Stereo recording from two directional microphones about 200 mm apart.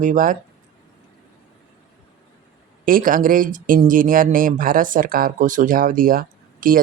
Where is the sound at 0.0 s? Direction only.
40° right (ahead or behind).